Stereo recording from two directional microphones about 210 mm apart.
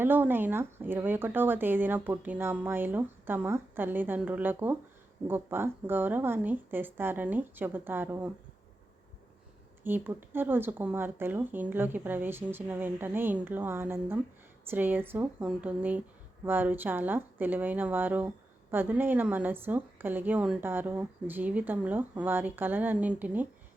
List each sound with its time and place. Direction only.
0.0 s speech: 10° right (ahead or behind)
9.8 s speech: 10° right (ahead or behind)